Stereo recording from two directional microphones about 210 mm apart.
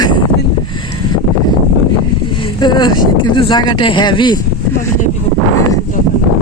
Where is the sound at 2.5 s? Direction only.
20° left (ahead or behind).